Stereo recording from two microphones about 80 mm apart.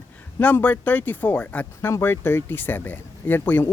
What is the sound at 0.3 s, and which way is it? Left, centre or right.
Speech, left.